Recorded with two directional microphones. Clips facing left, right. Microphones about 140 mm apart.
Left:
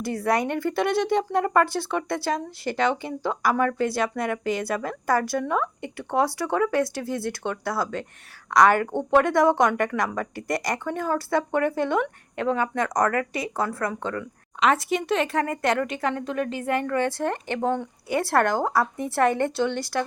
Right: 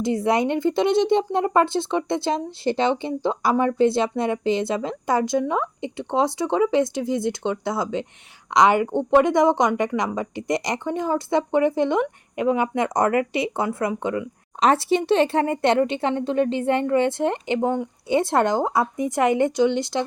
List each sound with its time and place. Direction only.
0.0 s speech: 20° right (ahead or behind)
14.6 s speech: 30° right (ahead or behind)